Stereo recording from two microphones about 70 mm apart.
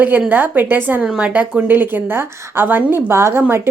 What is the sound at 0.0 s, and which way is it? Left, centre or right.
Speech, right.